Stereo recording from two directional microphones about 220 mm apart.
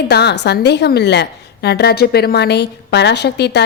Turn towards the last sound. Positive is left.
turn(degrees=50)  # may be behind; listen again after turning